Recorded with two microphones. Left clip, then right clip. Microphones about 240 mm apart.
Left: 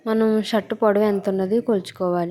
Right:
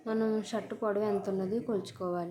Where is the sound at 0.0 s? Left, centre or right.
Left.